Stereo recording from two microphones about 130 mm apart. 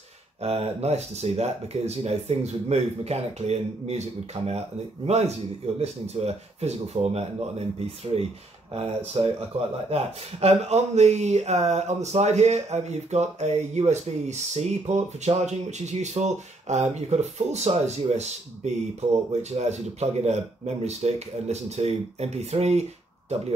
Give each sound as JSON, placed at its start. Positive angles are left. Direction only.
{"t": 0.4, "sound": "speech", "side_deg": -50}